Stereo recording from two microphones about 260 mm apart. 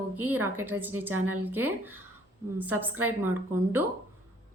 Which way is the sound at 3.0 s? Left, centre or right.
Centre.